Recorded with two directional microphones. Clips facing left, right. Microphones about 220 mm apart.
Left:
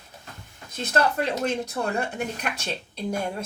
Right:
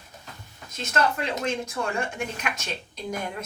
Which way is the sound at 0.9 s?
35° left (ahead or behind).